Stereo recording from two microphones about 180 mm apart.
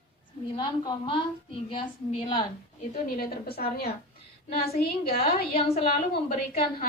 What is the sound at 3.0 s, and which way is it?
Speech, 55° left (ahead or behind).